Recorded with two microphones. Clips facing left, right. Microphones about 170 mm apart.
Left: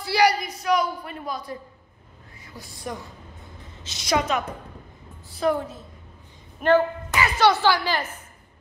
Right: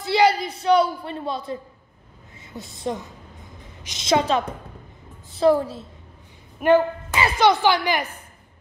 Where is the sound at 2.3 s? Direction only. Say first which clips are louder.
Right 5 dB; 25° right (ahead or behind).